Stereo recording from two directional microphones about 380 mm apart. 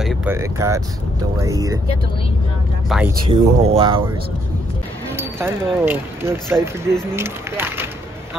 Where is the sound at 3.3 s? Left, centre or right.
Centre.